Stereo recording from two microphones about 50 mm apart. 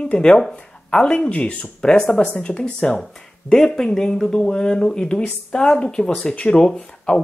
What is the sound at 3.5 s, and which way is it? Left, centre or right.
Speech, centre.